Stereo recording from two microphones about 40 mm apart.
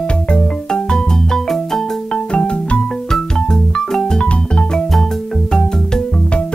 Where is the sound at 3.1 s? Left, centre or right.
Centre.